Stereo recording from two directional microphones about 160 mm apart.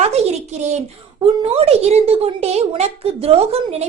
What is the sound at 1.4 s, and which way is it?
A woman's voice, 40° right (ahead or behind).